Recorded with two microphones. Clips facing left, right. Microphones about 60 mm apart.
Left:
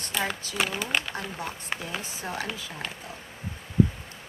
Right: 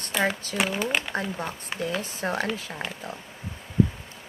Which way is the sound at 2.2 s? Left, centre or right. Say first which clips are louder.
Right 6 dB; right.